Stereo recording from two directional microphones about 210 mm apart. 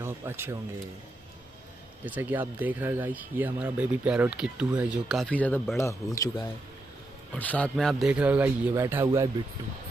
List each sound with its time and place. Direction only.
0.0 s speech: 10° right (ahead or behind)
2.0 s speech: 10° right (ahead or behind)